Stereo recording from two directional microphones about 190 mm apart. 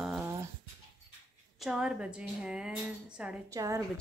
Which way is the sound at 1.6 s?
5° right (ahead or behind).